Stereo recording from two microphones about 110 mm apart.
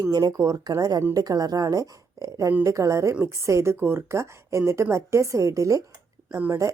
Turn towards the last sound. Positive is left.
turn(degrees=-30)  # may be behind; listen again after turning